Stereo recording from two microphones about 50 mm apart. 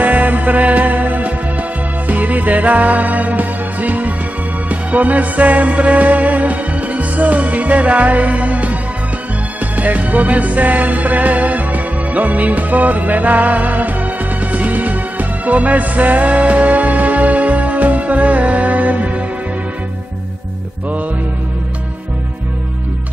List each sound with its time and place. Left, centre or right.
0.0 s music: right